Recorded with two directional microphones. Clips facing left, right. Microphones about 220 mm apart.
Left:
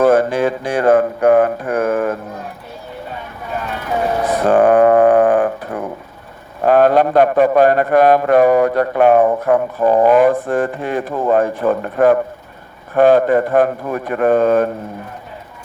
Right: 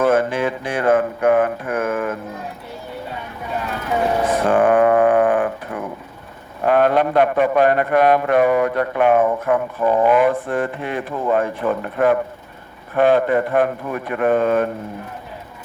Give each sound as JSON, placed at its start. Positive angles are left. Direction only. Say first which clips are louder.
{"t": 0.0, "sound": "mantra", "louder": "left 4 dB", "side_deg": 40}
{"t": 4.4, "sound": "a sound", "louder": "left 5 dB", "side_deg": 40}
{"t": 6.7, "sound": "a man's voice", "louder": "left 4 dB", "side_deg": 40}